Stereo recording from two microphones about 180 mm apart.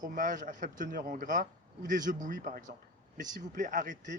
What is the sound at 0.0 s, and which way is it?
Speech, 45° right (ahead or behind).